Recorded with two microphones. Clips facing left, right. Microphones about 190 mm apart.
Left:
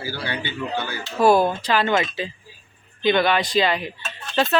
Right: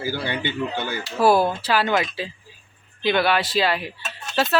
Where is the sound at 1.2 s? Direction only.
5° right (ahead or behind).